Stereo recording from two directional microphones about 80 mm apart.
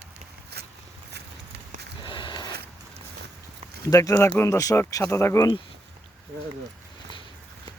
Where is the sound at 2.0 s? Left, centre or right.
Left.